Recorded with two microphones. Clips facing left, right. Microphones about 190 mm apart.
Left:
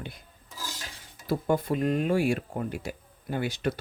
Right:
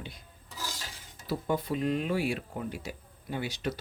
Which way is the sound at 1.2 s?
50° left (ahead or behind).